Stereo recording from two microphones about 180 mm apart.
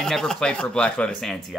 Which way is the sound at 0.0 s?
5° left (ahead or behind).